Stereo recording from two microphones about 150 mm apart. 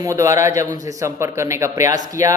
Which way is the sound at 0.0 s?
20° right (ahead or behind).